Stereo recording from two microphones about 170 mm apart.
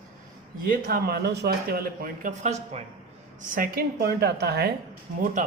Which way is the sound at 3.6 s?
65° right (ahead or behind).